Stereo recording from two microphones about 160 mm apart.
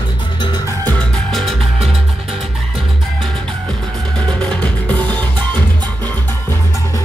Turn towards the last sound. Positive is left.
turn(degrees=10)  # may be behind; listen again after turning